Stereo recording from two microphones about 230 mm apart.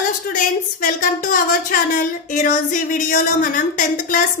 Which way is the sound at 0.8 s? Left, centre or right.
Left.